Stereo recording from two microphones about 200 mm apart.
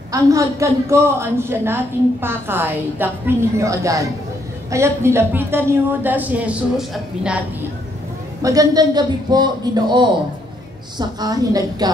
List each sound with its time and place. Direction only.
0.1 s a woman's voice: 15° right (ahead or behind)
8.4 s a man's voice: 15° right (ahead or behind)